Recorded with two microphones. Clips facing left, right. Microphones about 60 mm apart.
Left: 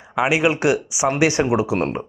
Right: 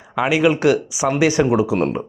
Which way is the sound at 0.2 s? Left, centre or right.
Centre.